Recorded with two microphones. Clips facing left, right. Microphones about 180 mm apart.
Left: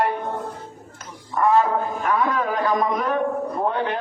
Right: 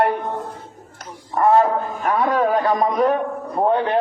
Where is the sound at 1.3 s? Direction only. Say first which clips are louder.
Right 3 dB; 40° right (ahead or behind).